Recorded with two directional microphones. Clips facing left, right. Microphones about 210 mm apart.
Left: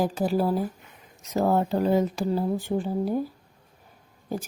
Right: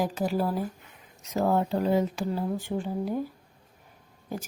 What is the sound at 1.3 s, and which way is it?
Speech, 40° left (ahead or behind).